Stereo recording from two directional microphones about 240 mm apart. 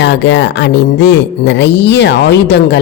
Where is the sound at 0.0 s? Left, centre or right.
Left.